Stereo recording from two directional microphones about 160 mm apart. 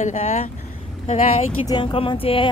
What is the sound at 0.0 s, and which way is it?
Speech, 45° left (ahead or behind).